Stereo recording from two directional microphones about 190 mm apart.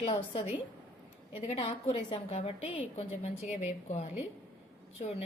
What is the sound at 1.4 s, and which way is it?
A woman's voice, 30° left (ahead or behind).